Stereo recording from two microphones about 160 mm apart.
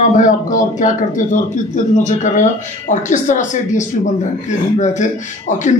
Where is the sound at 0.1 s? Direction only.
55° left (ahead or behind).